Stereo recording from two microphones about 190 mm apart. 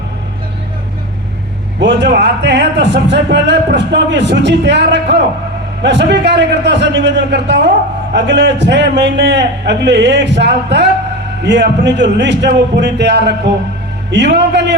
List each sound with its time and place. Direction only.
1.8 s speech: 65° right (ahead or behind)
12.8 s music: 65° right (ahead or behind)
14.1 s speech: 65° right (ahead or behind)